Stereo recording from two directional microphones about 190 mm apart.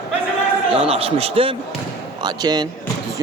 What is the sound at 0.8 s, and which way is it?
A man's voice, 30° right (ahead or behind).